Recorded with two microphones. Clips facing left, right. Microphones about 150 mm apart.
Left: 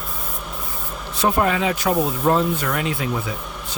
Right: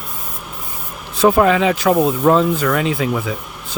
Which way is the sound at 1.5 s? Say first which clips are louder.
Right 6 dB; 90° right.